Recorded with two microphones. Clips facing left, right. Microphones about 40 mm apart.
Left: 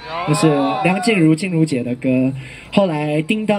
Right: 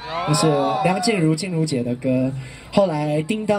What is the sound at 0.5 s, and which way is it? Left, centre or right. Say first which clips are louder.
Speech: left 2 dB; left.